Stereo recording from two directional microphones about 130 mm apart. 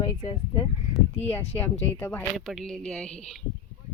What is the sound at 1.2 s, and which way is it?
Speech, 15° left (ahead or behind).